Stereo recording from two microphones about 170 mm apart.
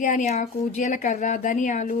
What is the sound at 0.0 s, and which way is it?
Speech, 50° left (ahead or behind).